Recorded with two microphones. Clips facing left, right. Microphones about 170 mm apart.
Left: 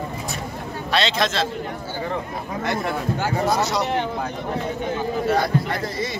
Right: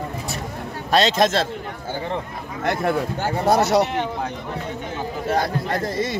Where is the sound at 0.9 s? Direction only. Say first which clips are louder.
Right 5 dB; 45° right (ahead or behind).